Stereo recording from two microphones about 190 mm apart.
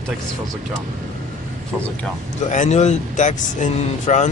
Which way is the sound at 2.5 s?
40° left (ahead or behind).